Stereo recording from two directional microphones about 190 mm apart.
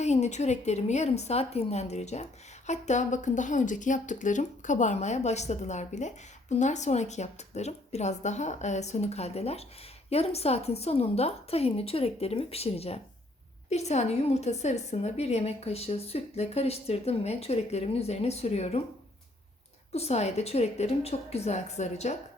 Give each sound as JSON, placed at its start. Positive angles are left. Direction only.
{"t": 0.0, "sound": "speech", "side_deg": 35}
{"t": 19.9, "sound": "speech", "side_deg": 35}